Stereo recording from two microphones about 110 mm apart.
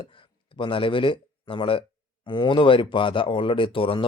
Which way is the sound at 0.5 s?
50° left (ahead or behind).